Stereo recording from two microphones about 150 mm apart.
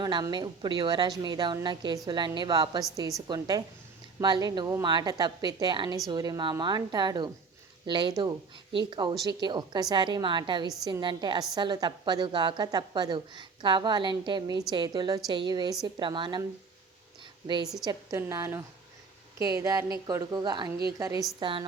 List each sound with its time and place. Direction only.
0.0 s a woman's voice: 30° right (ahead or behind)
17.4 s a woman's voice: 30° right (ahead or behind)
21.3 s a woman's voice: 35° right (ahead or behind)